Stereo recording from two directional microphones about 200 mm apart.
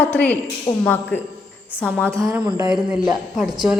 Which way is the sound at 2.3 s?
15° right (ahead or behind).